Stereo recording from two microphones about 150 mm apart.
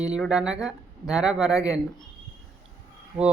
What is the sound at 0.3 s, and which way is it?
Speech, 5° right (ahead or behind).